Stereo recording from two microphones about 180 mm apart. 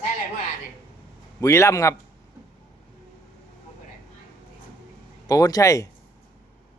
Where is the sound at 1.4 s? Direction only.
15° left (ahead or behind).